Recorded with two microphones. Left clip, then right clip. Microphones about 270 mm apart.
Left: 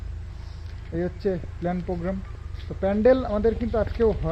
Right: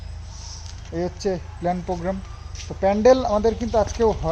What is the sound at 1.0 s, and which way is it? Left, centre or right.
Speech, centre.